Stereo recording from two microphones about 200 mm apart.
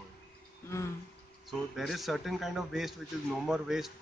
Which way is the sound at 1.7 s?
Centre (ahead or behind).